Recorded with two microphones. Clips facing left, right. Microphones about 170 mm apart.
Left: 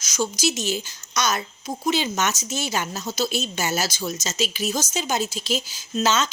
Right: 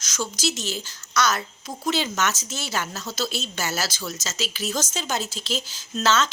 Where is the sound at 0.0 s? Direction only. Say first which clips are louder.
Left 4 dB; 10° left (ahead or behind).